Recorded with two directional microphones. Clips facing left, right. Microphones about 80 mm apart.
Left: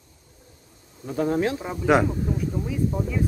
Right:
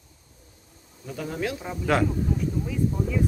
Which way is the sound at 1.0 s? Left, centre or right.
Left.